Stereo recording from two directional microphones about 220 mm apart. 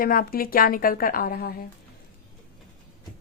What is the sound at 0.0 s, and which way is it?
A woman's voice, 40° left (ahead or behind).